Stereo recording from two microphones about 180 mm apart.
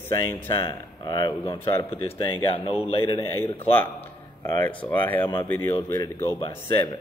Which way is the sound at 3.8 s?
15° left (ahead or behind).